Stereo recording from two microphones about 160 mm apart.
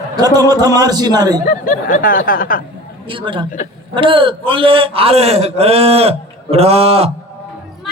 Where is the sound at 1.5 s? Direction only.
55° left (ahead or behind).